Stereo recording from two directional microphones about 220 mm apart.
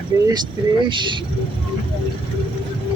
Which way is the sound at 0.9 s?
20° right (ahead or behind).